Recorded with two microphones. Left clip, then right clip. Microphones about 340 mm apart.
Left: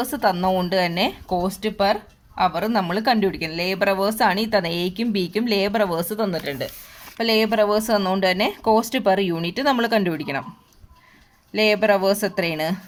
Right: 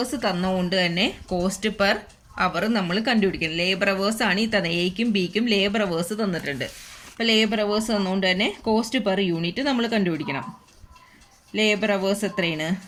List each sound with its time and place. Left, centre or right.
0.0 s speech: centre
11.5 s speech: centre